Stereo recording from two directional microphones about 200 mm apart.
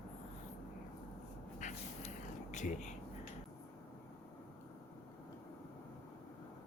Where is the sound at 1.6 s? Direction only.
35° left (ahead or behind).